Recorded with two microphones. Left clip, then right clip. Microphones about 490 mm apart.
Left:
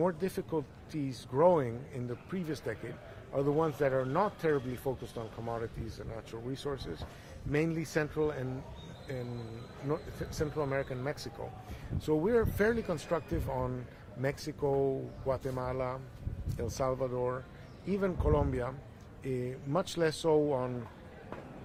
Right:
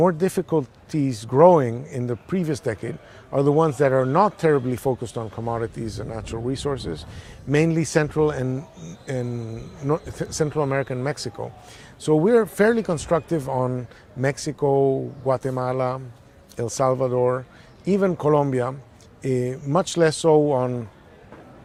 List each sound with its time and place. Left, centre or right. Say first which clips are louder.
0.0 s speech: right 12 dB; right
3.3 s a man's voice: right 12 dB; right
9.9 s a man's voice: right 12 dB; right
12.0 s speech: right 12 dB; right